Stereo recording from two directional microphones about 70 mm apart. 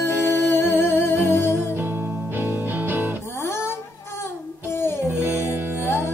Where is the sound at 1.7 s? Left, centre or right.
Right.